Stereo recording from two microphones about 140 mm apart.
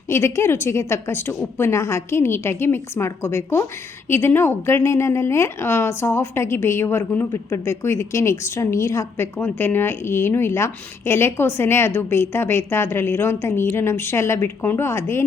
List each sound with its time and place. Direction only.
0.1 s a woman's voice: 20° left (ahead or behind)